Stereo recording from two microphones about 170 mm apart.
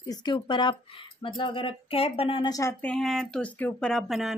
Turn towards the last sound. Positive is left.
turn(degrees=0)  # may be behind; listen again after turning